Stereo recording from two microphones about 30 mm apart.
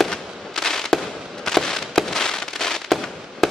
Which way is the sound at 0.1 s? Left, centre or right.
Centre.